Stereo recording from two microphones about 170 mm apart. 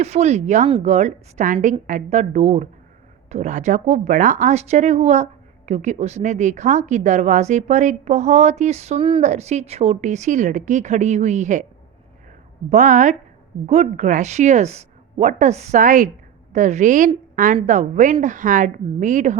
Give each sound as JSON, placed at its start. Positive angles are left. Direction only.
{"t": 0.0, "sound": "speech", "side_deg": -40}
{"t": 12.7, "sound": "speech", "side_deg": -45}